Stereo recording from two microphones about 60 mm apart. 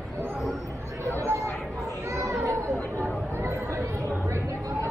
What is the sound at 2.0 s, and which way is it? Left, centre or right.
Children playing, right.